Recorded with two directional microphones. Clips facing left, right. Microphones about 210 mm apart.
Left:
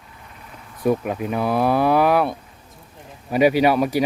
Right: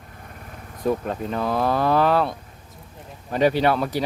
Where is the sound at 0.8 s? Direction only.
10° left (ahead or behind).